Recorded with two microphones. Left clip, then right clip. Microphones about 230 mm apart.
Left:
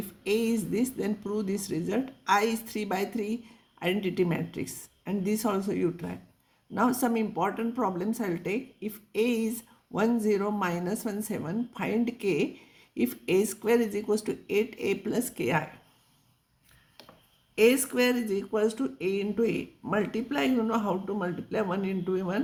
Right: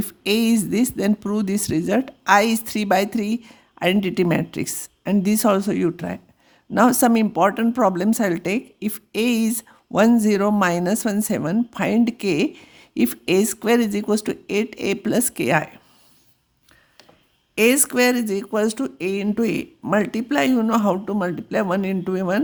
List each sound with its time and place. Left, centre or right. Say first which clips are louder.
0.2 s a woman's voice: right 7 dB; right
17.5 s a woman's voice: right 5 dB; right